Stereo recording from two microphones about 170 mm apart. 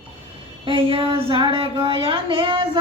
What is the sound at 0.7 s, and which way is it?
Speech, 30° right (ahead or behind).